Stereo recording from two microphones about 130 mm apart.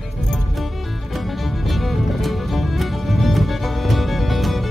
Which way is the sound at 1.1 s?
Centre (ahead or behind).